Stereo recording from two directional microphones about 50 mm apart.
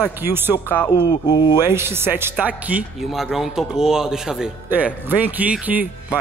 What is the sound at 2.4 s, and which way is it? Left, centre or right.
Speech, right.